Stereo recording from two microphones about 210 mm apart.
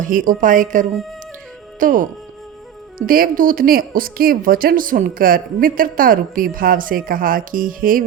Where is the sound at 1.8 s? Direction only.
40° right (ahead or behind).